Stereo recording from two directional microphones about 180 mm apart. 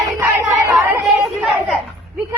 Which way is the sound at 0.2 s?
15° right (ahead or behind).